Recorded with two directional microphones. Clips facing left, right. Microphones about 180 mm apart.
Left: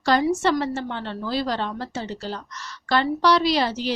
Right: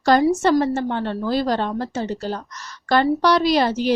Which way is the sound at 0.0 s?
45° right (ahead or behind).